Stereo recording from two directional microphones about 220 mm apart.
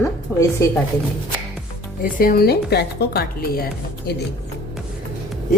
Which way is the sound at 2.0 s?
40° left (ahead or behind).